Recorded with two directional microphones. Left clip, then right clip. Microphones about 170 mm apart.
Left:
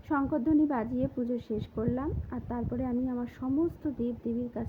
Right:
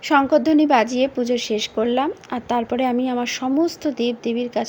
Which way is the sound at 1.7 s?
25° right (ahead or behind).